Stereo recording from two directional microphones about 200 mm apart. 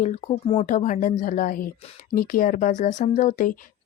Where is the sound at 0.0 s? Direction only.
30° left (ahead or behind).